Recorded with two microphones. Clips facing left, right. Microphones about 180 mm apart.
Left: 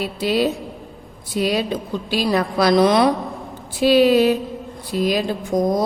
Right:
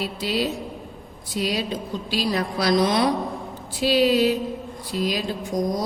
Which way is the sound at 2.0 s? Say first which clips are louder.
Left 5 dB; 55° left (ahead or behind).